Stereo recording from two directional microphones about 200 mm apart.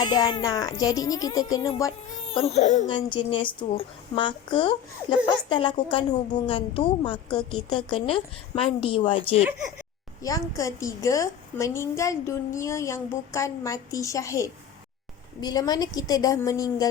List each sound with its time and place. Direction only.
0.0 s speech: 20° left (ahead or behind)
2.3 s speech: 30° left (ahead or behind)
2.8 s a woman's voice: 25° left (ahead or behind)